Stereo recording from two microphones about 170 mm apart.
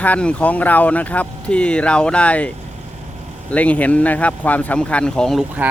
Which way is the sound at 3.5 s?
10° left (ahead or behind).